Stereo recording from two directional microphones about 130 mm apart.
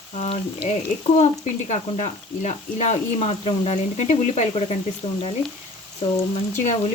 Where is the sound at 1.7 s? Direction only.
65° left (ahead or behind).